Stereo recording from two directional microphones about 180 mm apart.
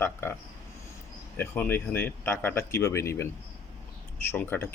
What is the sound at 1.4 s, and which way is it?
Speech, 10° left (ahead or behind).